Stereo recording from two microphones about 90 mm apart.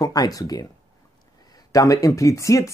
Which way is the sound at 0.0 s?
45° left (ahead or behind).